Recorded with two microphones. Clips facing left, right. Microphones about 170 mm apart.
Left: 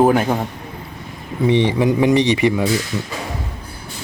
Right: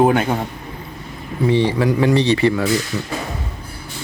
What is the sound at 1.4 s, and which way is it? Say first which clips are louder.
Speech: left 1 dB; 20° left (ahead or behind).